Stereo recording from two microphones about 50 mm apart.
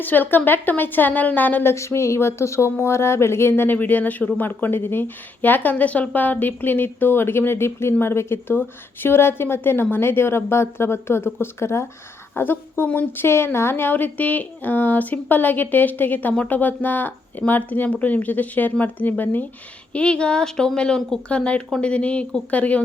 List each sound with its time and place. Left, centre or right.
0.0 s a woman's voice: left
1.7 s speech: left
3.5 s a woman's voice: left
12.3 s a woman's voice: left
12.9 s a woman's voice: left
13.2 s a woman's voice: left
19.9 s speech: left